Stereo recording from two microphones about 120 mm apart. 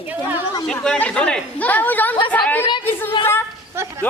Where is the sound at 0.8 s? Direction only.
10° left (ahead or behind).